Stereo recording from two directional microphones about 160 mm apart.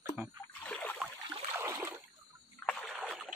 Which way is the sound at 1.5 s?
15° right (ahead or behind).